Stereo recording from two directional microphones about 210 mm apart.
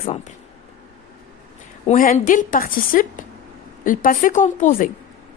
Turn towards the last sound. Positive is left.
turn(degrees=35)  # may be behind; listen again after turning